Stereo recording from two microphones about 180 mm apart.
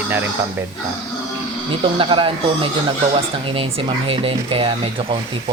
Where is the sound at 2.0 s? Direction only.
30° right (ahead or behind).